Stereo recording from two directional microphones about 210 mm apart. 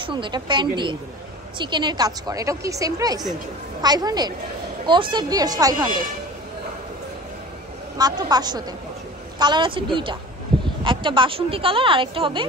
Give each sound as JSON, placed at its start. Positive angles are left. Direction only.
{"t": 0.0, "sound": "a woman's voice", "side_deg": -25}
{"t": 8.0, "sound": "a woman's voice", "side_deg": -20}